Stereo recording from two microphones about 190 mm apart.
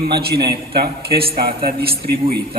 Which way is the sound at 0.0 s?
55° right (ahead or behind).